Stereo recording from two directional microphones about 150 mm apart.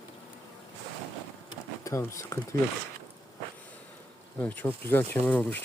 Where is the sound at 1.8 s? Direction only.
20° left (ahead or behind).